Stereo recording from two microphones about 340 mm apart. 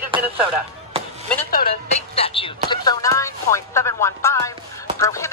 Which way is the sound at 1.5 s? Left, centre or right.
Left.